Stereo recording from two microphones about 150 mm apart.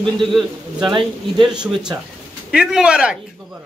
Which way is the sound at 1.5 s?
5° right (ahead or behind).